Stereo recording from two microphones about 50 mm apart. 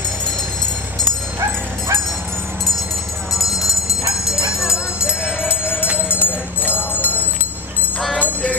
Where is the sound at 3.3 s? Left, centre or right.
Centre.